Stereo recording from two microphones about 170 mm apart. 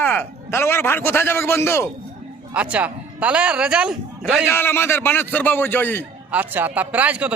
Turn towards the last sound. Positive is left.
turn(degrees=-10)  # may be behind; listen again after turning